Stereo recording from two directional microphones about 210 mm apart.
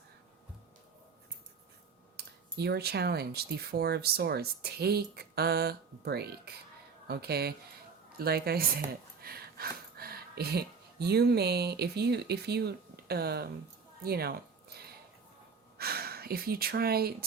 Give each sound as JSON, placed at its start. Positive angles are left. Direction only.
{"t": 2.1, "sound": "speech", "side_deg": -50}
{"t": 14.0, "sound": "a sound", "side_deg": -50}
{"t": 15.8, "sound": "speech", "side_deg": -45}